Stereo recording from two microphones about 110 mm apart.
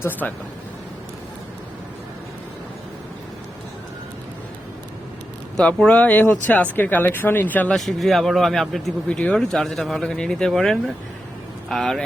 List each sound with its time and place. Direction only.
0.0 s speech: 15° left (ahead or behind)
5.5 s speech: 5° left (ahead or behind)
7.8 s speech: centre (ahead or behind)